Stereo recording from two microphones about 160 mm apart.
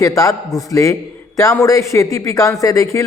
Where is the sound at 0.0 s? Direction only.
20° left (ahead or behind).